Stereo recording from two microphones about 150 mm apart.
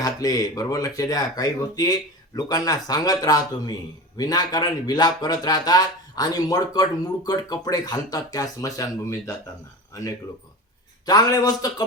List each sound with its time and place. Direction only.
0.0 s speech: 25° left (ahead or behind)
11.0 s speech: 25° left (ahead or behind)